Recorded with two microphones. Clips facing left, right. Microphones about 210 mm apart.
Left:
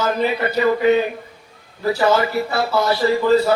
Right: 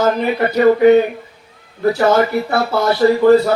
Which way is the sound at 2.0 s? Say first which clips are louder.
Right 2 dB; 55° right (ahead or behind).